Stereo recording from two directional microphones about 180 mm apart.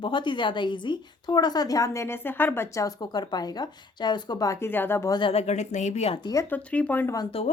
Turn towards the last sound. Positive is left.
turn(degrees=30)  # may be behind; listen again after turning